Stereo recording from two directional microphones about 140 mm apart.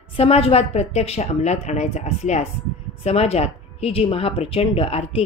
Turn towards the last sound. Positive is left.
turn(degrees=45)  # may be behind; listen again after turning